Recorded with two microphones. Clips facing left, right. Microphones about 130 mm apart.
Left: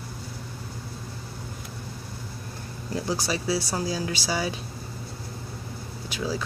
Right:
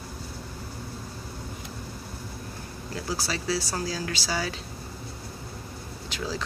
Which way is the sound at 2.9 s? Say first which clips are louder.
Left 4 dB; 20° left (ahead or behind).